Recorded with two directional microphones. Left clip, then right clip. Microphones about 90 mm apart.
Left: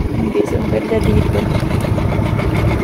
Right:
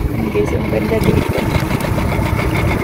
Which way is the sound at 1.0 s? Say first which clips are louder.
Right 2 dB; 80° right.